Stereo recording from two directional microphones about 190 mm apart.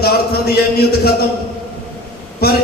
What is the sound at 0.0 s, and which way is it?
Speech, 55° left (ahead or behind).